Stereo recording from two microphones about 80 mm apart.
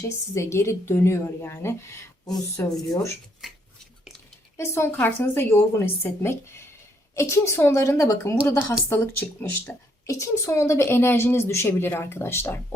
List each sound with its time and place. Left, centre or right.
0.3 s a woman's voice: left
2.2 s a woman's voice: left
4.5 s a woman's voice: left
8.9 s speech: left
10.1 s a woman's voice: left